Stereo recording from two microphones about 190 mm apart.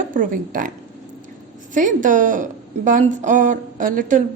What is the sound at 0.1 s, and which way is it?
Speech, 45° right (ahead or behind).